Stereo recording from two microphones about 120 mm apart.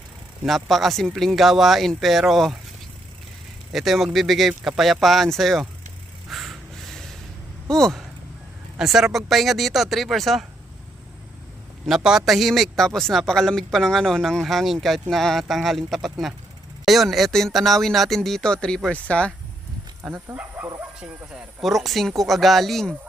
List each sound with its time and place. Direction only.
0.4 s speech: centre (ahead or behind)
3.7 s speech: centre (ahead or behind)
6.3 s snort: centre (ahead or behind)
7.7 s speech: 5° left (ahead or behind)
11.9 s speech: 5° right (ahead or behind)
20.0 s speech: 20° right (ahead or behind); by 23.0 s 5° left (ahead or behind)